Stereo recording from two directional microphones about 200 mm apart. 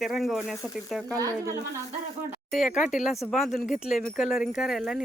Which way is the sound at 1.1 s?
15° right (ahead or behind).